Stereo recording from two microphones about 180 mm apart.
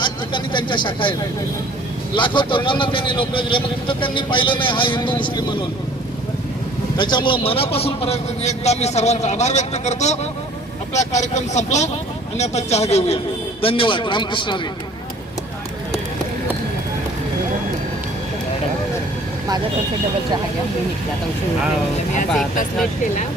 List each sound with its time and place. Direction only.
0.0 s speech: 25° left (ahead or behind)
2.1 s a man's voice: 25° left (ahead or behind)
6.9 s a man's voice: 25° left (ahead or behind)